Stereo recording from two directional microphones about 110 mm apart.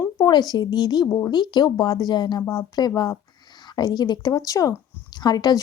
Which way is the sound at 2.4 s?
30° left (ahead or behind).